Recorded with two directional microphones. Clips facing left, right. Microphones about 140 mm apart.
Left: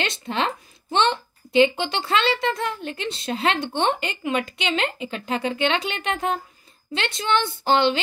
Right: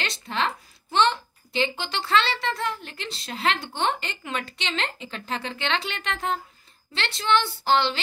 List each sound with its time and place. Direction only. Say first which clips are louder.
0.0 s a child's voice: left 3 dB; 20° left (ahead or behind)